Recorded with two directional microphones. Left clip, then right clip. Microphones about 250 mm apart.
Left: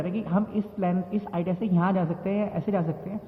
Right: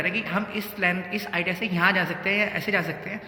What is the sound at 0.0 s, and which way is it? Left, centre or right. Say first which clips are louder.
A man's voice: right 4 dB; centre.